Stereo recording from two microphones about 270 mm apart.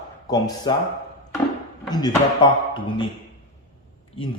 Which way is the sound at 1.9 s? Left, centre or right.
Centre.